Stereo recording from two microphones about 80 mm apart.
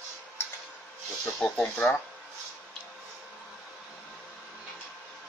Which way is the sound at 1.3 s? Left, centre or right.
Centre.